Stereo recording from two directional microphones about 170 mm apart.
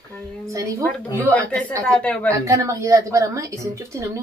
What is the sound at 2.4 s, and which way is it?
A woman's voice, 20° right (ahead or behind).